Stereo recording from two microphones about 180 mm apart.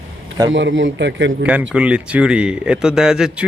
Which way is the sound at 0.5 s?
90° right.